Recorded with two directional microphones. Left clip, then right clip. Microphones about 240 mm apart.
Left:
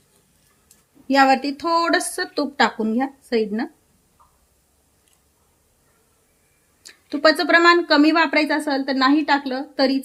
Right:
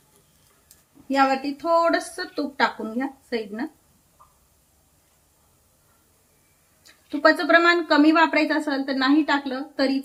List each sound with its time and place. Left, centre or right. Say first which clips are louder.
1.0 s a woman's voice: left 5 dB; left
6.8 s a woman's voice: left 2 dB; left